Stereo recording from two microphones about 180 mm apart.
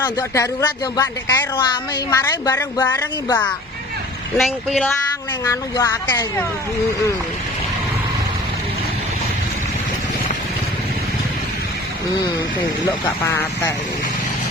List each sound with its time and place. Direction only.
0.0 s speech: 20° left (ahead or behind)
4.4 s speech: centre (ahead or behind)
5.5 s speech: 15° left (ahead or behind)
13.2 s speech: 10° left (ahead or behind)